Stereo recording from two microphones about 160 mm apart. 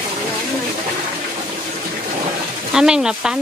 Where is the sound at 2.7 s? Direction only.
5° right (ahead or behind).